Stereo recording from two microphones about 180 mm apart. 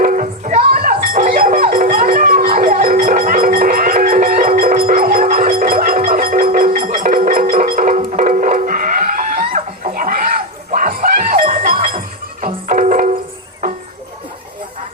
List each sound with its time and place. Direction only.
0.0 s music: 45° right (ahead or behind)